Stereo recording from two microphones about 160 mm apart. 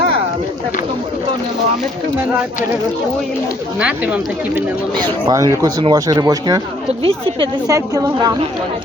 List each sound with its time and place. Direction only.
3.8 s speech: 5° right (ahead or behind)
5.2 s speech: 25° right (ahead or behind)
7.0 s speech: 35° right (ahead or behind)
7.7 s speech: 20° right (ahead or behind)